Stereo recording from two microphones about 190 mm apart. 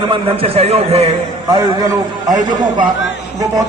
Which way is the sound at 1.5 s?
20° right (ahead or behind).